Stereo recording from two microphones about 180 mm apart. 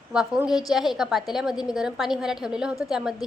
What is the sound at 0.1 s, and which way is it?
A woman's voice, 5° right (ahead or behind).